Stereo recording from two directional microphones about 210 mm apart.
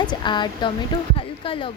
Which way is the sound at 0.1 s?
20° left (ahead or behind).